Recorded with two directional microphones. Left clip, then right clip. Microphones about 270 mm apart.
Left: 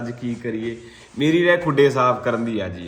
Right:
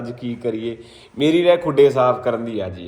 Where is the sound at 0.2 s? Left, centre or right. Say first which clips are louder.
Right 5 dB; centre.